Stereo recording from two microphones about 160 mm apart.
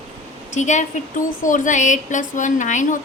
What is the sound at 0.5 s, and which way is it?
A woman's voice, 50° left (ahead or behind).